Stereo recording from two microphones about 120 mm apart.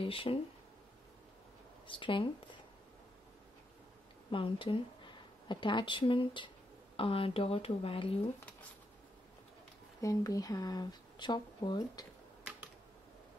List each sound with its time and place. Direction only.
0.0 s speech: 50° left (ahead or behind)
1.9 s speech: 45° left (ahead or behind)
4.3 s a woman's voice: 45° left (ahead or behind)
10.0 s speech: 30° left (ahead or behind)